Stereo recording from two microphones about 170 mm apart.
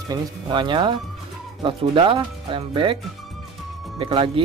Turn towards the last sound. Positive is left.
turn(degrees=-30)  # may be behind; listen again after turning